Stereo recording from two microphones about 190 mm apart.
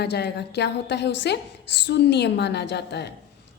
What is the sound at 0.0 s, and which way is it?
A woman's voice, 60° left (ahead or behind).